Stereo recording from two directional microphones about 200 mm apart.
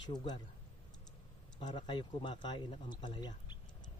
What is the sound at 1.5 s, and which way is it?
Speech, 25° left (ahead or behind).